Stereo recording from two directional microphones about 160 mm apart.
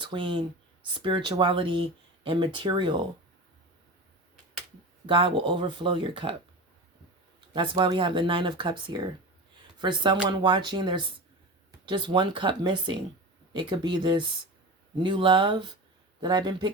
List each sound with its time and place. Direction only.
0.0 s speech: 30° right (ahead or behind)
5.0 s speech: 30° right (ahead or behind)
7.5 s speech: 30° right (ahead or behind)